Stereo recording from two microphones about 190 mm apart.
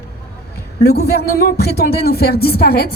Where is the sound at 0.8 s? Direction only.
55° left (ahead or behind).